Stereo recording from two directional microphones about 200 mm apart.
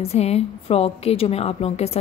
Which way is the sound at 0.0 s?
30° left (ahead or behind).